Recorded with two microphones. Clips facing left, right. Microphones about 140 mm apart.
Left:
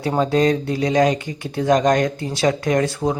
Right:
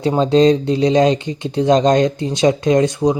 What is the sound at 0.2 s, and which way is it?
Speech, 25° right (ahead or behind).